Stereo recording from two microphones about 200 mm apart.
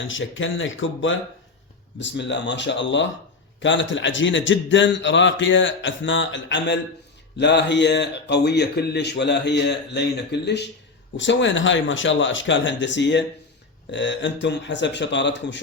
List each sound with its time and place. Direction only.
0.1 s a man's voice: 75° left (ahead or behind)
2.0 s a man's voice: 65° left (ahead or behind)